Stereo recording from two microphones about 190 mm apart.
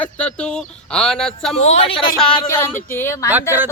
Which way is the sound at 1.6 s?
35° left (ahead or behind).